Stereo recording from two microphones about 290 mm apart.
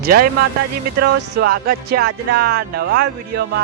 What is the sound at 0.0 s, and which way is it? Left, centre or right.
Speech, right.